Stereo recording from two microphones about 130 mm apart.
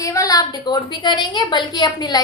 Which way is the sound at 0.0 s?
25° left (ahead or behind).